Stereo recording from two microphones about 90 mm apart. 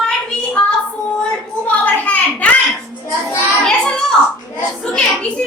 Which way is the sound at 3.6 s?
10° left (ahead or behind).